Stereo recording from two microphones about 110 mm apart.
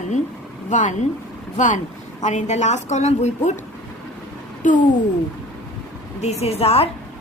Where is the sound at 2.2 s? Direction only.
90° left.